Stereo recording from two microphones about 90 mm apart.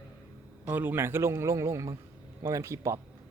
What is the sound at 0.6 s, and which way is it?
A man's voice, 20° right (ahead or behind).